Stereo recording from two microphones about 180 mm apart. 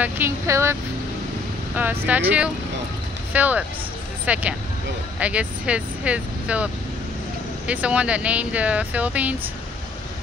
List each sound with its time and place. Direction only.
0.0 s speech: 15° right (ahead or behind)
1.8 s speech: 10° right (ahead or behind)